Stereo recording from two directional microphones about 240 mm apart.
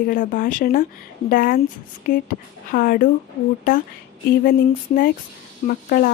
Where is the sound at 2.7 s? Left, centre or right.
Left.